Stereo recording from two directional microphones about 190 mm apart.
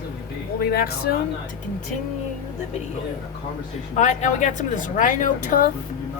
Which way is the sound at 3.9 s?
40° left (ahead or behind).